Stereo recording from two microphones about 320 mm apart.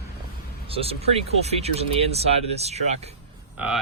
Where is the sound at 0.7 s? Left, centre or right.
Centre.